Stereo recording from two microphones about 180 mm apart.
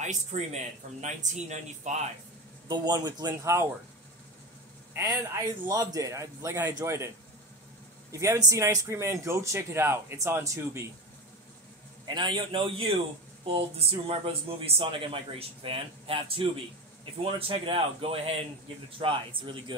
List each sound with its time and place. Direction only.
0.0 s speech: 40° right (ahead or behind)
2.7 s speech: 20° right (ahead or behind)
4.9 s a man's voice: 20° right (ahead or behind)
8.1 s a man's voice: 15° right (ahead or behind)
12.1 s speech: 25° right (ahead or behind)